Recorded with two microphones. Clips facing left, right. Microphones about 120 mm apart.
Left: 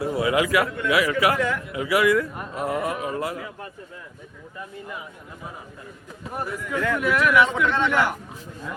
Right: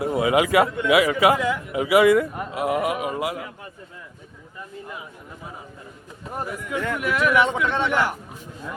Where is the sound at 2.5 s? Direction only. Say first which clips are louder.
Right 3 dB; 10° right (ahead or behind).